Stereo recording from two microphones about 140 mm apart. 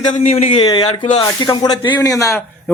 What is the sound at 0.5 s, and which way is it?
A man's voice, 35° left (ahead or behind).